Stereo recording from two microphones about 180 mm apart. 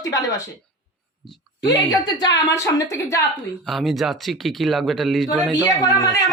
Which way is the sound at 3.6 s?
Centre (ahead or behind).